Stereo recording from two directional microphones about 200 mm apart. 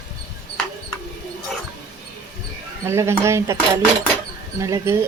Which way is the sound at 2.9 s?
15° right (ahead or behind).